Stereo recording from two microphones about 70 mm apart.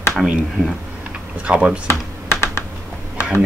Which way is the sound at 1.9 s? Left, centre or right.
Left.